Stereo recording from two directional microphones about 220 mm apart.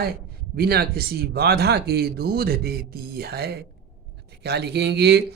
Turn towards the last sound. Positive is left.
turn(degrees=-50)  # may be behind; listen again after turning